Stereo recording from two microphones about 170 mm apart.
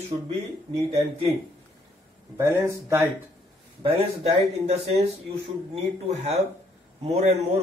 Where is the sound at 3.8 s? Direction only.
35° right (ahead or behind).